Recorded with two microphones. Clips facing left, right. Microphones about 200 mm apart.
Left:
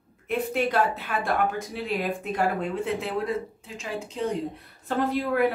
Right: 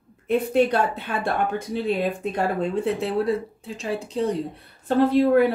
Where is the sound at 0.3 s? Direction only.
30° right (ahead or behind).